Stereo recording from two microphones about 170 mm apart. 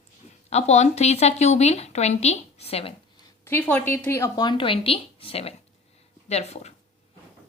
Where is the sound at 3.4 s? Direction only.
10° left (ahead or behind).